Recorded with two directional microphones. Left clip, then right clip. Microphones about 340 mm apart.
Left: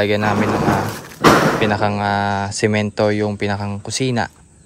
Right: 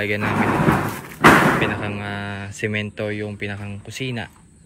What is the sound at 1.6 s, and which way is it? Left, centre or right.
Speech, centre.